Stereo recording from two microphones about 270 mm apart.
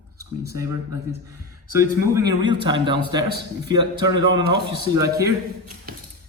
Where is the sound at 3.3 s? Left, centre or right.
Right.